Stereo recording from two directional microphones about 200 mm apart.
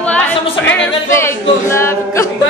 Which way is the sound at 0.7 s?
10° left (ahead or behind).